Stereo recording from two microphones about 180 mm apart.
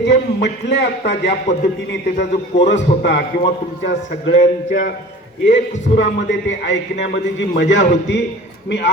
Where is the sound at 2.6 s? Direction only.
75° left (ahead or behind).